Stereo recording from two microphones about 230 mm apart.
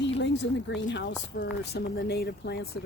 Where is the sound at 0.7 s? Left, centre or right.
Left.